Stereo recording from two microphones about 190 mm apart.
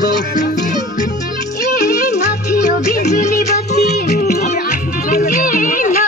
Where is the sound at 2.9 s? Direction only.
40° left (ahead or behind).